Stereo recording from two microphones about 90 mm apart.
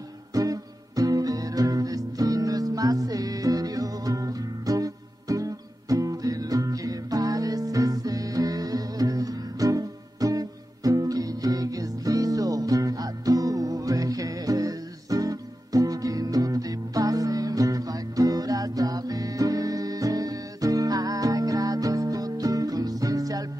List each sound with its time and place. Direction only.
0.3 s music: 40° right (ahead or behind)